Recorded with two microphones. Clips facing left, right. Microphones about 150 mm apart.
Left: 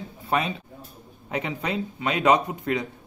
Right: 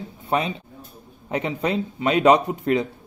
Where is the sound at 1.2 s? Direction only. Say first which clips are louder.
Right 4 dB; 30° right (ahead or behind).